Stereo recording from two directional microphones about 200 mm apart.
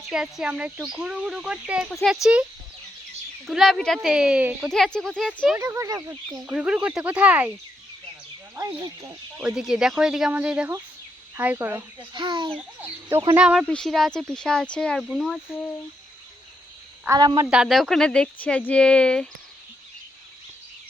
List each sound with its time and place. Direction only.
0.1 s speech: 5° right (ahead or behind)
3.4 s speech: centre (ahead or behind)
4.7 s speech: centre (ahead or behind)
5.5 s speech: 15° right (ahead or behind)
6.5 s speech: 5° right (ahead or behind)
8.5 s speech: 15° right (ahead or behind)
9.5 s speech: 5° right (ahead or behind)
11.9 s a child's voice: 25° right (ahead or behind)
12.8 s speech: 10° right (ahead or behind)
17.1 s a child's voice: 20° right (ahead or behind)
17.5 s speech: centre (ahead or behind)